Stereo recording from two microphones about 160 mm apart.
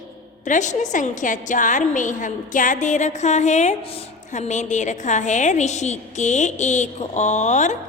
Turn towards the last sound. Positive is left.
turn(degrees=50)  # may be behind; listen again after turning